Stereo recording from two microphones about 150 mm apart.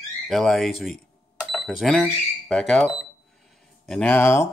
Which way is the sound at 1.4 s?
Centre (ahead or behind).